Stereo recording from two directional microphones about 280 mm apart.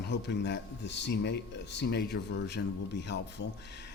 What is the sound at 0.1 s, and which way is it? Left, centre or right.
Speech, left.